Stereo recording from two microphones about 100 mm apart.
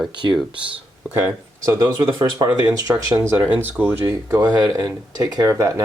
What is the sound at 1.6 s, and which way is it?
Speech, 45° right (ahead or behind).